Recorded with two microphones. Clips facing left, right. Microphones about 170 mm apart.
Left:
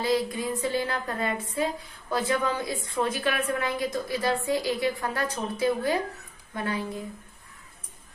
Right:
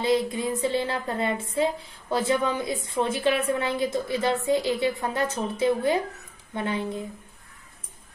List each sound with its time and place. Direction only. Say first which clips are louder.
0.0 s speech: right 2 dB; 25° right (ahead or behind)